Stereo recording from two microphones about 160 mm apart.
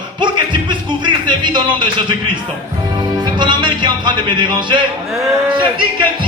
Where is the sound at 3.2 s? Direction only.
30° right (ahead or behind).